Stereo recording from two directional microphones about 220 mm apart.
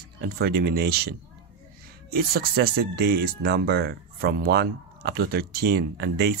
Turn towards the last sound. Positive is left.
turn(degrees=-50)  # may be behind; listen again after turning